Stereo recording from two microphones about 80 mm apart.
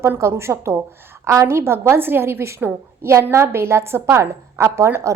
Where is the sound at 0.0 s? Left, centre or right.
Right.